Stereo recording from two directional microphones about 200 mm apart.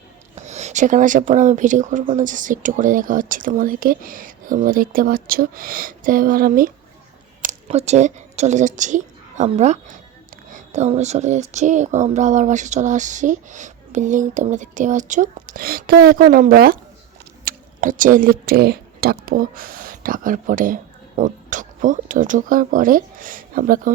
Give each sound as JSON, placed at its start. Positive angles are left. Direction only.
{"t": 0.3, "sound": "speech", "side_deg": -35}
{"t": 7.4, "sound": "speech", "side_deg": -35}